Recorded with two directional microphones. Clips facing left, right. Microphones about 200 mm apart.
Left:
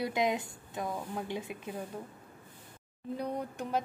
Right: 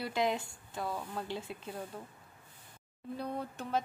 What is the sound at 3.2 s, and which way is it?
Speech, 15° left (ahead or behind).